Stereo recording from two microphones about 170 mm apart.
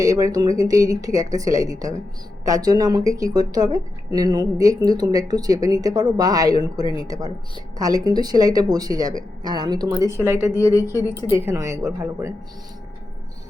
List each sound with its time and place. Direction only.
0.0 s speech: 20° right (ahead or behind)
10.6 s a woman's voice: 20° left (ahead or behind)
10.8 s speech: 15° right (ahead or behind)